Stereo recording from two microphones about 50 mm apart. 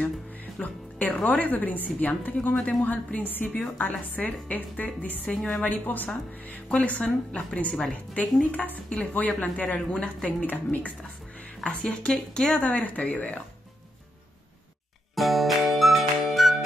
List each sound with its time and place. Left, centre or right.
0.6 s a woman's voice: left
5.3 s a woman's voice: centre
5.6 s a woman's voice: left
10.4 s a woman's voice: left
11.6 s speech: left
15.1 s music: centre